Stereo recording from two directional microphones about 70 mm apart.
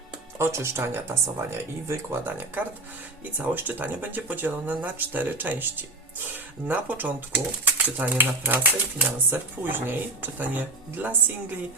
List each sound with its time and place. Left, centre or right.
0.3 s speech: right
2.2 s speech: right